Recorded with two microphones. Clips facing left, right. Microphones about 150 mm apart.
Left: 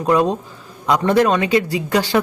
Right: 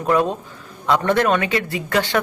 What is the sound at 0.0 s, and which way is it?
Speech, 15° left (ahead or behind).